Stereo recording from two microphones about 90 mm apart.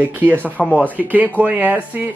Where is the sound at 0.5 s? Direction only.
15° left (ahead or behind).